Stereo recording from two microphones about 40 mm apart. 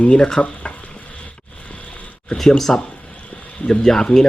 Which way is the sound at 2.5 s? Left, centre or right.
Centre.